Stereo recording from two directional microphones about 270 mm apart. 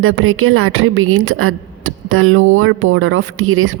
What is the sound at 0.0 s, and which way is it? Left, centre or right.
A woman's voice, right.